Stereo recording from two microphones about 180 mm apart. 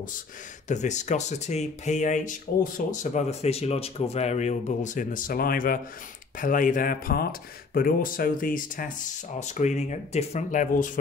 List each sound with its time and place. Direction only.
0.7 s speech: 40° left (ahead or behind)